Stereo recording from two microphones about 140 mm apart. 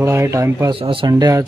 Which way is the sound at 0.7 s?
40° right (ahead or behind).